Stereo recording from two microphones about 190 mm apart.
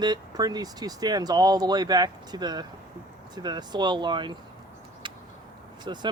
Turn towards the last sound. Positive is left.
turn(degrees=-25)  # may be behind; listen again after turning